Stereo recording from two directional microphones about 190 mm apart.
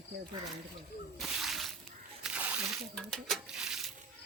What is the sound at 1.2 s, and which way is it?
Whip, centre (ahead or behind).